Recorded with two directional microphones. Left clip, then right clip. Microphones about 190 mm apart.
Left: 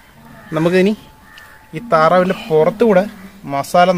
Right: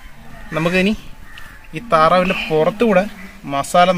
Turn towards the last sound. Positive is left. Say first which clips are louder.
# left 1 dB
turn(degrees=20)  # may be behind; listen again after turning